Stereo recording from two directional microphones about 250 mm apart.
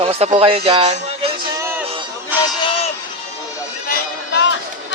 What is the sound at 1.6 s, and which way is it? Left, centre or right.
Music, centre.